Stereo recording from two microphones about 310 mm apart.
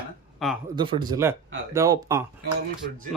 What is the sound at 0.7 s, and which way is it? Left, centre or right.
Speech, centre.